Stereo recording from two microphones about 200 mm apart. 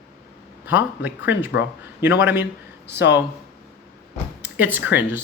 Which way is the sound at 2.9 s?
60° left (ahead or behind).